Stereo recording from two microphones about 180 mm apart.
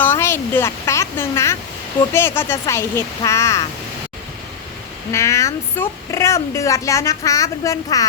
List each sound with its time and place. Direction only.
0.0 s a sound: 15° left (ahead or behind)
2.1 s speech: 15° left (ahead or behind)
5.1 s speech: 15° left (ahead or behind)